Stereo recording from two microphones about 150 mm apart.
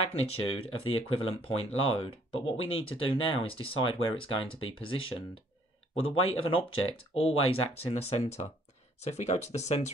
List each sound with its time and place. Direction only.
0.0 s speech: 40° left (ahead or behind)